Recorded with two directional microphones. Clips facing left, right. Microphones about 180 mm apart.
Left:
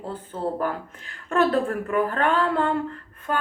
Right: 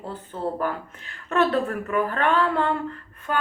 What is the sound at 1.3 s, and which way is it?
Speech, 45° left (ahead or behind).